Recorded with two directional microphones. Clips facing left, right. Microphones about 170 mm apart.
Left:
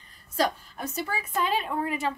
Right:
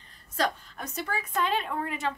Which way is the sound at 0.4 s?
10° left (ahead or behind).